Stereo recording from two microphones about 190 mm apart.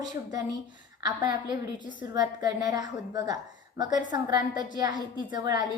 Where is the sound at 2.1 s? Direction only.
20° right (ahead or behind).